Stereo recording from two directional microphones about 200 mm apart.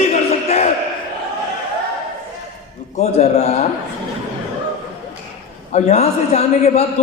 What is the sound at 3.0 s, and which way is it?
Speech, 35° left (ahead or behind).